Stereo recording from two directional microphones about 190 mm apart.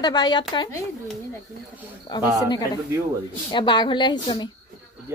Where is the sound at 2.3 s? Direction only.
20° left (ahead or behind).